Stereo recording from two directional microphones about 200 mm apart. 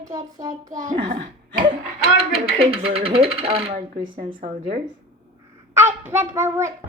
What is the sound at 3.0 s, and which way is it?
Speech, 30° right (ahead or behind).